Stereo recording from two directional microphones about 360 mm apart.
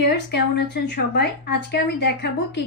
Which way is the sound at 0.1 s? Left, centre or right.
Left.